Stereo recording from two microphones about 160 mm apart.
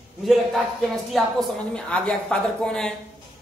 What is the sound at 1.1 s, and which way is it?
Speech, 5° left (ahead or behind).